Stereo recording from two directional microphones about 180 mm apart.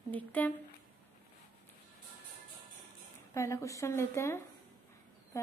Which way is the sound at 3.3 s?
15° left (ahead or behind).